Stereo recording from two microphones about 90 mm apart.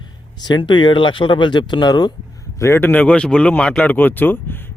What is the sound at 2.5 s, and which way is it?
Speech, 35° left (ahead or behind).